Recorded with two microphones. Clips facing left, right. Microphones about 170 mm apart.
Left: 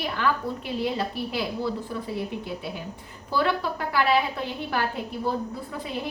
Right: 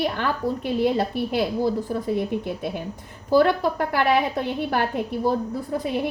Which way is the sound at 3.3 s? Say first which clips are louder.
Right 7 dB; 45° right (ahead or behind).